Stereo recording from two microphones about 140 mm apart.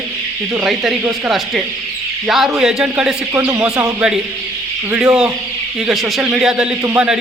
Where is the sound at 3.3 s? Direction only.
20° right (ahead or behind).